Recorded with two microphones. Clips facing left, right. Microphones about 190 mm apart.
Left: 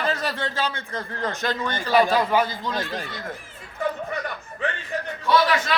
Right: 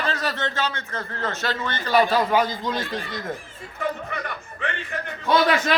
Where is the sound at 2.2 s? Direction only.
10° right (ahead or behind).